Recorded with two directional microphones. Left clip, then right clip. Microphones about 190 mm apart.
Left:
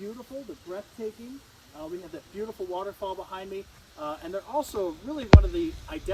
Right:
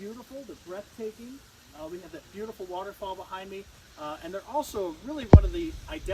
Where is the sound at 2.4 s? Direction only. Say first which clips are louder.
Left 3 dB; 25° left (ahead or behind).